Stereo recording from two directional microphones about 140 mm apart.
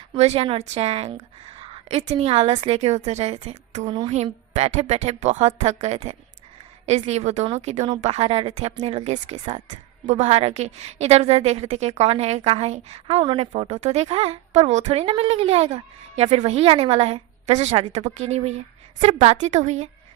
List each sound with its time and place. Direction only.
0.1 s a woman's voice: 45° right (ahead or behind)